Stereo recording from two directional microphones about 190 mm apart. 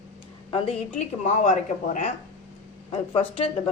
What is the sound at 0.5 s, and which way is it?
A woman's voice, 30° left (ahead or behind).